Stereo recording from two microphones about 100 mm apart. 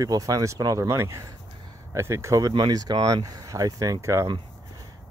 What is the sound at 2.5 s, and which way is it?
Speech, 45° right (ahead or behind).